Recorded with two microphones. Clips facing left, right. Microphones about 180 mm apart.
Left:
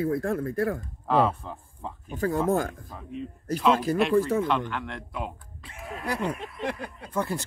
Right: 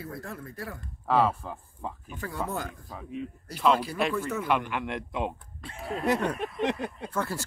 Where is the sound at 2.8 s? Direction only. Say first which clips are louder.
Even; 5° right (ahead or behind).